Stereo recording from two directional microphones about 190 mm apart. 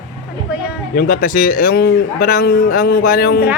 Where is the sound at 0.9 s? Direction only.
50° left (ahead or behind).